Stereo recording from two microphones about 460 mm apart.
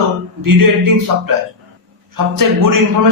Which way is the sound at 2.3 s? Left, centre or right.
Right.